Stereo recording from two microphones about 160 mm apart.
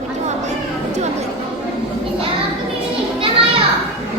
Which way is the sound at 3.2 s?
35° right (ahead or behind).